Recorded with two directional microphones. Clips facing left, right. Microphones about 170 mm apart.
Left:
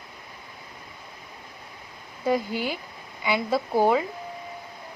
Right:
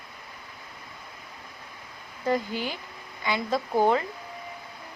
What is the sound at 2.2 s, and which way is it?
Speech, 10° left (ahead or behind).